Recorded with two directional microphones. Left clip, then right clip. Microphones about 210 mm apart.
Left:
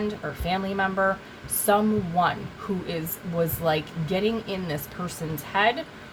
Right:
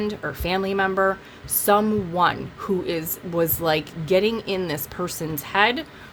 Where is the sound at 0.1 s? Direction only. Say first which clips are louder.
Right 3 dB; 55° right (ahead or behind).